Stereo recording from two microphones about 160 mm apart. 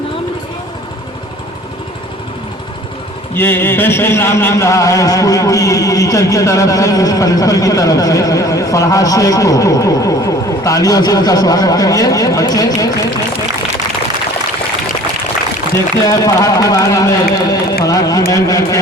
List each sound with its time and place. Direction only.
3.3 s a man's voice: 15° left (ahead or behind)
16.0 s a man's voice: 20° left (ahead or behind)